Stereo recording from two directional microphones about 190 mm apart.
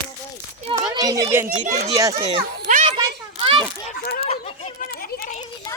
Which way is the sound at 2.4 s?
45° right (ahead or behind).